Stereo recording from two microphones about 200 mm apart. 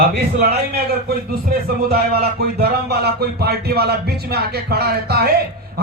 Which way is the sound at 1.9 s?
50° right (ahead or behind).